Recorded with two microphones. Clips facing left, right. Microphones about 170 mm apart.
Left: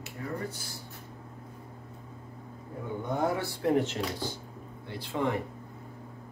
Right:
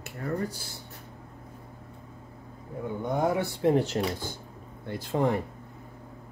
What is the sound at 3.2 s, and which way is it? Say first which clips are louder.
Speech: right 4 dB; 20° right (ahead or behind).